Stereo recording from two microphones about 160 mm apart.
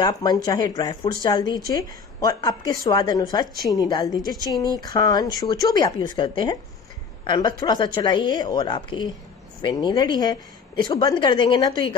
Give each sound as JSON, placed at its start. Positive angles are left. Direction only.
{"t": 0.0, "sound": "a woman's voice", "side_deg": 25}